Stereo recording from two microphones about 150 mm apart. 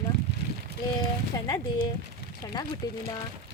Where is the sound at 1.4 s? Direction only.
25° left (ahead or behind).